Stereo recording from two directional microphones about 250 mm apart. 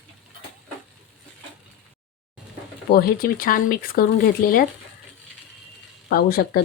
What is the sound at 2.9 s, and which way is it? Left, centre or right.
Speech, left.